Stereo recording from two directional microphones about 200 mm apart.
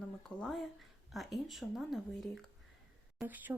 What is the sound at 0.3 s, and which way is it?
Speech, 5° left (ahead or behind).